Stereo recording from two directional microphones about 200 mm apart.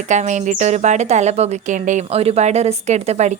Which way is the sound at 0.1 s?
35° right (ahead or behind).